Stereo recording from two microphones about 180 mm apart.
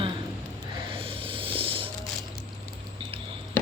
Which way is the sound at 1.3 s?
30° right (ahead or behind).